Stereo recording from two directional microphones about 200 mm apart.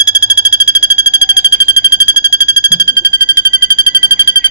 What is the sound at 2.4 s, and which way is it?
Alarm, 20° left (ahead or behind).